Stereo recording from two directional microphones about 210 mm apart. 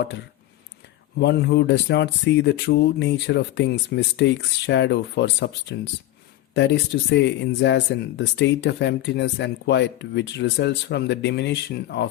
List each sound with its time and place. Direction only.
1.2 s speech: 55° left (ahead or behind)